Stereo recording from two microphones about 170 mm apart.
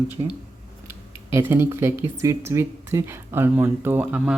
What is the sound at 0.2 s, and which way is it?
Speech, 30° right (ahead or behind).